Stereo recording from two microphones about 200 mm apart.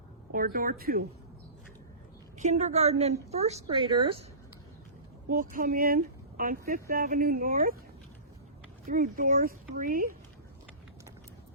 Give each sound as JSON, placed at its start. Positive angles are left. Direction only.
{"t": 0.3, "sound": "speech", "side_deg": -45}
{"t": 2.4, "sound": "a woman's voice", "side_deg": -35}
{"t": 5.3, "sound": "speech", "side_deg": -40}
{"t": 8.9, "sound": "speech", "side_deg": -40}